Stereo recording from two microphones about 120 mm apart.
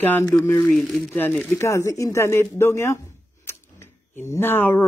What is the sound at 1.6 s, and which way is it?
Speech, 25° left (ahead or behind).